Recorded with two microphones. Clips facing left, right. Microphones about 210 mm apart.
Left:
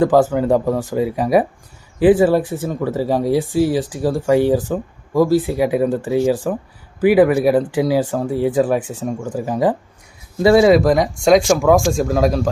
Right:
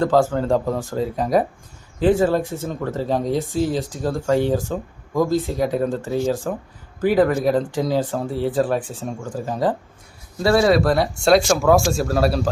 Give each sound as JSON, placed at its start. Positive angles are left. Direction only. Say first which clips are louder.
{"t": 0.0, "sound": "speech", "louder": "left 4 dB", "side_deg": 15}